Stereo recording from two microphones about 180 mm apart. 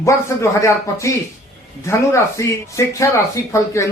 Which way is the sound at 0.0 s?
15° left (ahead or behind).